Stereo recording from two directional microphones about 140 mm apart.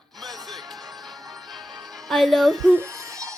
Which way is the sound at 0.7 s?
Centre (ahead or behind).